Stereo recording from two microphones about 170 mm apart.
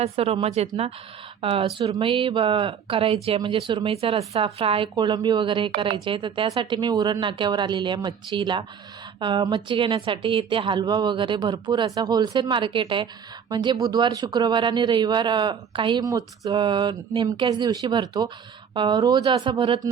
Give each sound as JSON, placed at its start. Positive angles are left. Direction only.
{"t": 0.0, "sound": "speech", "side_deg": -35}